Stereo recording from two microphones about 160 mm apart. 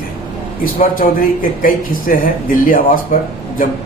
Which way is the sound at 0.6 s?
60° left (ahead or behind).